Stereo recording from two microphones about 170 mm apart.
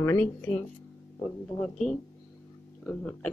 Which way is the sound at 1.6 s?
Centre (ahead or behind).